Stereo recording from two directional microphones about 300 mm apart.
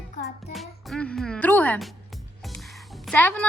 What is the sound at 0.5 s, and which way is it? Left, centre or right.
Music, centre.